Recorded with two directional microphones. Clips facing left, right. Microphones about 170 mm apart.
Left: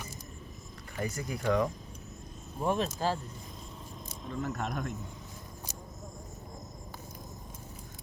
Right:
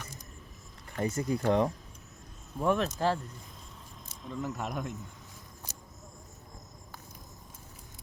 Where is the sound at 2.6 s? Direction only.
65° right (ahead or behind).